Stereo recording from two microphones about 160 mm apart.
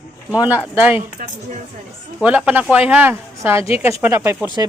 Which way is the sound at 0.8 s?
10° right (ahead or behind).